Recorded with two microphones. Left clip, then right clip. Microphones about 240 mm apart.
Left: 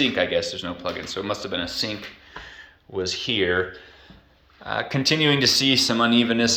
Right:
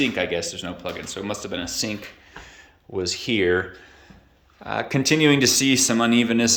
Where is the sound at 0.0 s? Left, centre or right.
Centre.